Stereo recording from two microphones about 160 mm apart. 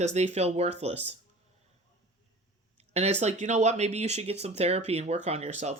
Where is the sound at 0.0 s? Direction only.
45° right (ahead or behind).